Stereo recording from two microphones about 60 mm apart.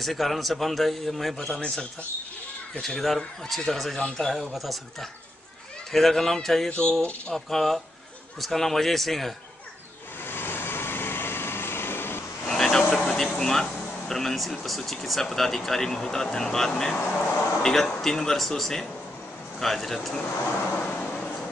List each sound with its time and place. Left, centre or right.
0.0 s a man's voice: centre
2.8 s a man's voice: centre
5.9 s a man's voice: centre
6.7 s speech: centre
7.3 s a man's voice: centre
10.2 s vehicle: left
12.4 s vehicle: centre
13.0 s a sound: centre
14.5 s a man's voice: centre